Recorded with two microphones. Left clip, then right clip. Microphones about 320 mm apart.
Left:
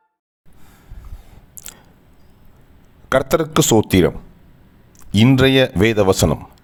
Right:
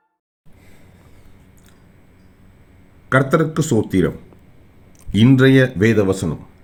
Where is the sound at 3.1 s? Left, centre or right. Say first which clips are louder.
Even; left.